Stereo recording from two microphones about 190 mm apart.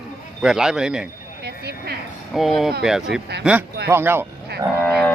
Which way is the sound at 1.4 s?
60° right (ahead or behind).